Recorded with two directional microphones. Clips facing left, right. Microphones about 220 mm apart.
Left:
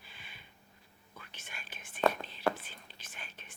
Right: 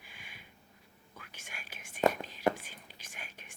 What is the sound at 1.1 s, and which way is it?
Whispering, 10° right (ahead or behind).